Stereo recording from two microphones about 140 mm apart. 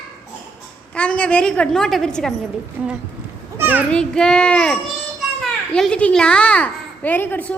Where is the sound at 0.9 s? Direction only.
10° left (ahead or behind).